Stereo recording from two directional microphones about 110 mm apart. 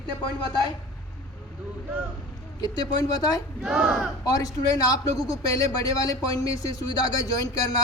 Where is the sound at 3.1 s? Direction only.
35° left (ahead or behind).